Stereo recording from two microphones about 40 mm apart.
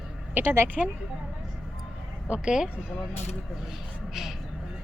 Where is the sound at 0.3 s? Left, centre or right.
Right.